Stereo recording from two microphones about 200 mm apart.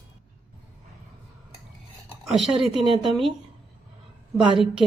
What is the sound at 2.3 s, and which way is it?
A woman's voice, centre (ahead or behind).